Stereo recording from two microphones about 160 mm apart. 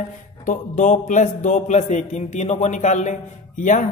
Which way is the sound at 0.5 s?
55° left (ahead or behind).